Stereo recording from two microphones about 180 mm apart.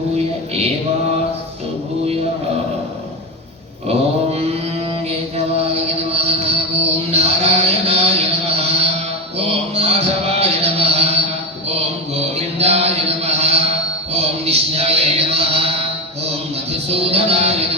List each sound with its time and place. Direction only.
6.0 s chant: 35° right (ahead or behind)
9.4 s mantra: 35° right (ahead or behind)
14.1 s music: 35° right (ahead or behind)
16.9 s music: 35° right (ahead or behind)